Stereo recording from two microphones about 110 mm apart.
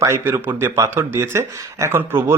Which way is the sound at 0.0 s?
25° right (ahead or behind).